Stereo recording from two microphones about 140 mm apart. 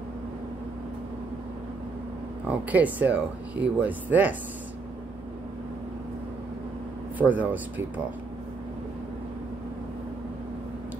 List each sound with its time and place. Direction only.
2.4 s speech: 10° right (ahead or behind)
7.2 s speech: 10° right (ahead or behind)